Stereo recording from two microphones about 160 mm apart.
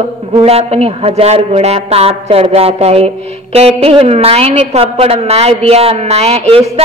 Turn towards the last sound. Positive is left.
turn(degrees=-40)  # may be behind; listen again after turning